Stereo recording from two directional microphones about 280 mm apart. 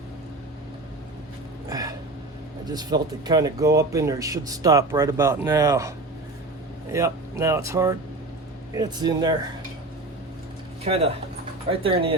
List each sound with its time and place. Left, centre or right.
1.7 s hiccup: centre
2.6 s speech: centre
6.9 s speech: centre
10.8 s speech: right